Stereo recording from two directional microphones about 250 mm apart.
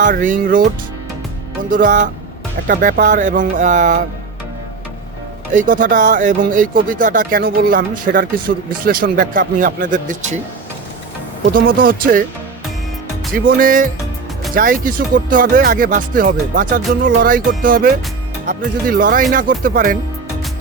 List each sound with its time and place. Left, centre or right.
0.0 s speech: right
1.7 s speech: right
5.5 s speech: right
11.5 s speech: right
13.6 s speech: right